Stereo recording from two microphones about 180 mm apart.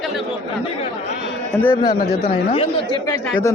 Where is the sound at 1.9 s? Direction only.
55° left (ahead or behind).